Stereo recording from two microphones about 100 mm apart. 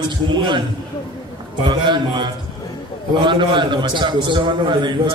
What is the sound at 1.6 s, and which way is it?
A man's voice, 50° right (ahead or behind).